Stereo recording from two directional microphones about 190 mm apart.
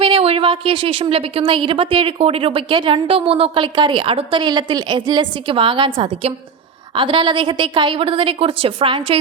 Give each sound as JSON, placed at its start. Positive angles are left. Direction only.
{"t": 0.0, "sound": "a woman's voice", "side_deg": -30}